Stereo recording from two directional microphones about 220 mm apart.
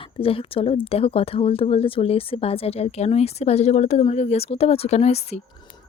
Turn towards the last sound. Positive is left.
turn(degrees=30)  # may be behind; listen again after turning